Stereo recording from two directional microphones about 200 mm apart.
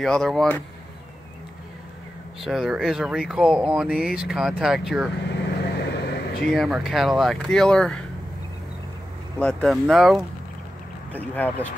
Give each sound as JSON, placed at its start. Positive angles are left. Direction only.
{"t": 0.0, "sound": "speech", "side_deg": 0}
{"t": 2.4, "sound": "speech", "side_deg": 0}
{"t": 5.3, "sound": "vehicle", "side_deg": 55}
{"t": 6.4, "sound": "speech", "side_deg": 0}
{"t": 9.4, "sound": "speech", "side_deg": 5}